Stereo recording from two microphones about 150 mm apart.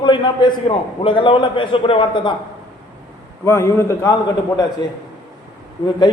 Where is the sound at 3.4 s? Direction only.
20° left (ahead or behind).